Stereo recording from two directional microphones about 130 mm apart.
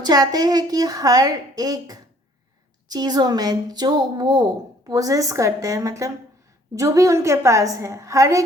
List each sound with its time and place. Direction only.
0.0 s a woman's voice: 30° right (ahead or behind)